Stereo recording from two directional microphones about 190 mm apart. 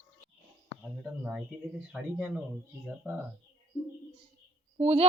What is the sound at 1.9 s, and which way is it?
Speech, 10° right (ahead or behind).